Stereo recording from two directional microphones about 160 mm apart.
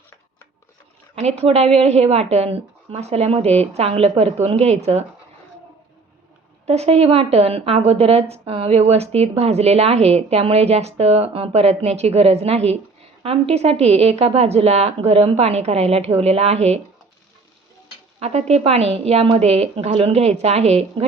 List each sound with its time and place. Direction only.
1.4 s a woman's voice: 40° right (ahead or behind)
6.7 s a woman's voice: 40° right (ahead or behind)
18.2 s a woman's voice: 40° right (ahead or behind)